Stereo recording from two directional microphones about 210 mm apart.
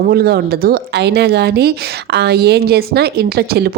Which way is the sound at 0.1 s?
50° right (ahead or behind).